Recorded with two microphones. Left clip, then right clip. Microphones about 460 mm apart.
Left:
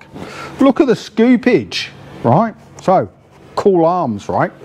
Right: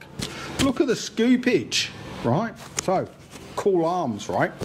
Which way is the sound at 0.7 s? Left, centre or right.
Left.